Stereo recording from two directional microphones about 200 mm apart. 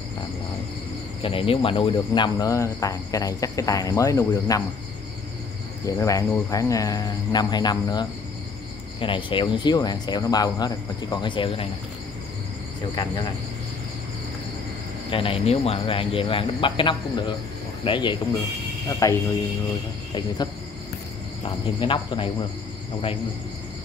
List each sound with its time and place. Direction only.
1.2 s speech: 30° left (ahead or behind)
5.9 s speech: 15° left (ahead or behind)
15.0 s speech: 25° left (ahead or behind)
21.4 s speech: 25° left (ahead or behind)